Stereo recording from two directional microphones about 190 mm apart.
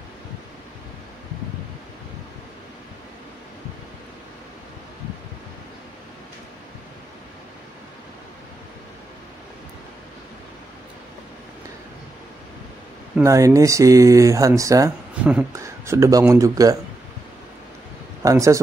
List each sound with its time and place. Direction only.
13.2 s speech: 15° right (ahead or behind)
18.2 s a man's voice: 15° right (ahead or behind)